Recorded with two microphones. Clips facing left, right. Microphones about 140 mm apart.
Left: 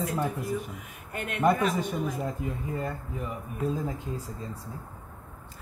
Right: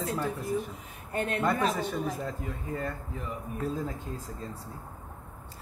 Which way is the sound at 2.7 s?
10° left (ahead or behind).